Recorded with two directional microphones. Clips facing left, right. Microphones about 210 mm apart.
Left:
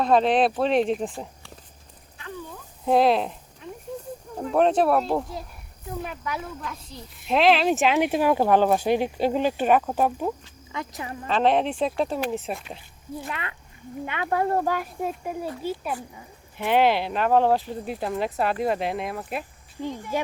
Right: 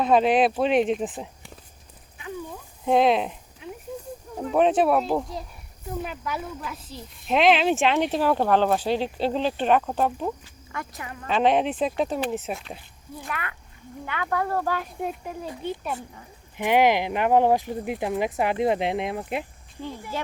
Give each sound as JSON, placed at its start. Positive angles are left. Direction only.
{"t": 0.0, "sound": "speech", "side_deg": -5}
{"t": 2.8, "sound": "speech", "side_deg": 0}
{"t": 3.9, "sound": "snake", "side_deg": 0}
{"t": 4.4, "sound": "speech", "side_deg": 0}
{"t": 11.3, "sound": "speech", "side_deg": 0}
{"t": 13.2, "sound": "speech", "side_deg": 25}
{"t": 14.7, "sound": "speech", "side_deg": 10}
{"t": 16.6, "sound": "speech", "side_deg": -15}
{"t": 20.1, "sound": "speech", "side_deg": 15}